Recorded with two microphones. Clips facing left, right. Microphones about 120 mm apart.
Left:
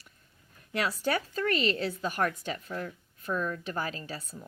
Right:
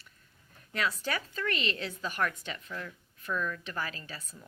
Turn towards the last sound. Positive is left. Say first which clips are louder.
# left 6 dB
turn(degrees=30)  # may be behind; listen again after turning